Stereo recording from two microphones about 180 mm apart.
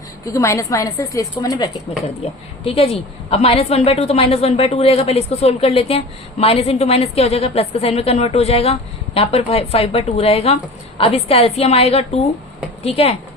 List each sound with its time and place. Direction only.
0.3 s a woman's voice: 15° left (ahead or behind)
2.2 s a woman's voice: 35° left (ahead or behind)